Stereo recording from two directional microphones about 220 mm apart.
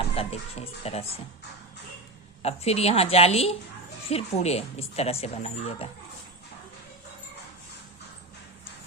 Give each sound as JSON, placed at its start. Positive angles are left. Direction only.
{"t": 0.2, "sound": "speech", "side_deg": 25}
{"t": 2.4, "sound": "speech", "side_deg": 30}